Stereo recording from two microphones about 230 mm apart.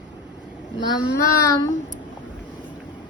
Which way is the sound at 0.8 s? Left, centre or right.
Centre.